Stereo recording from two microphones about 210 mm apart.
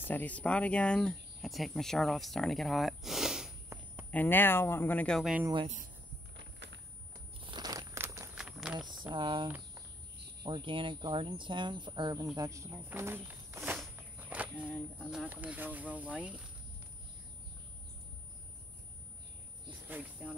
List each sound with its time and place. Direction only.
0.0 s speech: 10° left (ahead or behind)
4.1 s speech: 10° left (ahead or behind)
6.3 s a sound: 55° right (ahead or behind)
7.3 s crumpling: 25° right (ahead or behind); by 8.7 s 5° right (ahead or behind)
8.7 s speech: 20° right (ahead or behind)
19.9 s speech: 5° right (ahead or behind)